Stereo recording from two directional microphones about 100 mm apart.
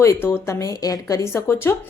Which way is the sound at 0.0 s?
25° left (ahead or behind).